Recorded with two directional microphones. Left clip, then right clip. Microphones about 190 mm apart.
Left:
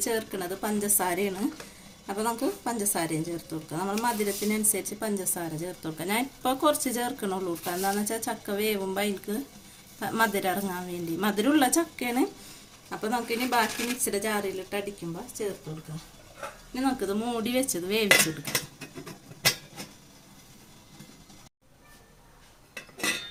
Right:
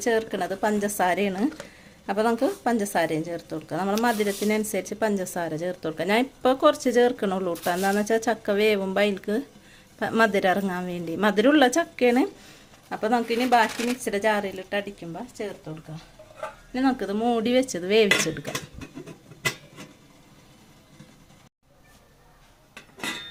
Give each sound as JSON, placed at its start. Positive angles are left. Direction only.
{"t": 0.0, "sound": "speech", "side_deg": -40}
{"t": 16.7, "sound": "speech", "side_deg": -40}